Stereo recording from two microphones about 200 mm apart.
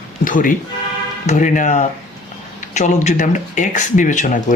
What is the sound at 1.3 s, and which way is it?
Speech, 40° left (ahead or behind).